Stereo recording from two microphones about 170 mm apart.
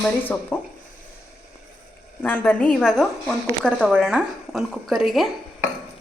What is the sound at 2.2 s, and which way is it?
A woman's voice, 10° left (ahead or behind).